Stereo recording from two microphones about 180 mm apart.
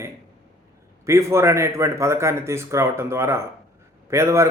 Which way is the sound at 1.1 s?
15° right (ahead or behind).